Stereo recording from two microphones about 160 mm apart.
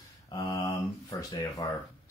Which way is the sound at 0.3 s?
25° left (ahead or behind).